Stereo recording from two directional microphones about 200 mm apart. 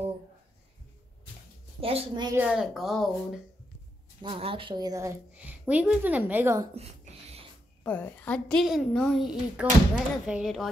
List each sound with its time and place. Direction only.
1.8 s a woman's voice: 30° right (ahead or behind)
2.3 s a woman's voice: 5° right (ahead or behind)
4.2 s a woman's voice: 25° right (ahead or behind)
6.7 s a sound: 30° right (ahead or behind)
7.8 s a woman's voice: 5° left (ahead or behind)